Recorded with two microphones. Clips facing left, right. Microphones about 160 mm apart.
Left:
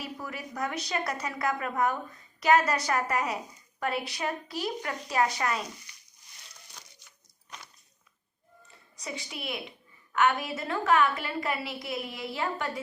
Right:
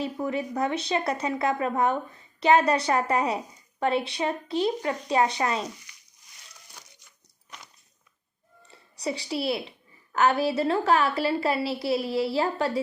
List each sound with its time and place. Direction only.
0.0 s a woman's voice: 25° right (ahead or behind)
8.7 s a woman's voice: 30° right (ahead or behind)